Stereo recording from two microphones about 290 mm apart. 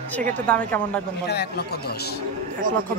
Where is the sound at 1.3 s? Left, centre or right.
Left.